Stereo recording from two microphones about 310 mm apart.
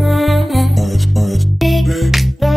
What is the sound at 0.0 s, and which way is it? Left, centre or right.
Music, centre.